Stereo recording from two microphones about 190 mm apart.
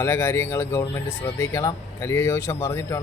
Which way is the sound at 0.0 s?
15° left (ahead or behind).